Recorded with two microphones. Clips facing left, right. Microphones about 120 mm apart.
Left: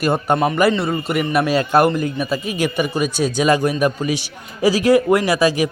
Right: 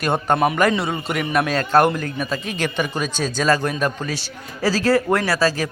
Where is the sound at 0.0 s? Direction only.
5° left (ahead or behind).